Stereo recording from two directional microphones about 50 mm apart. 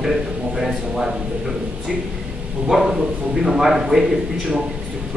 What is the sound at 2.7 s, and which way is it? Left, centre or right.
A man's voice, centre.